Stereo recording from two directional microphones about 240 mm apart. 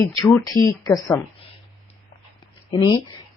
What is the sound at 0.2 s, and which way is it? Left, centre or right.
A woman's voice, centre.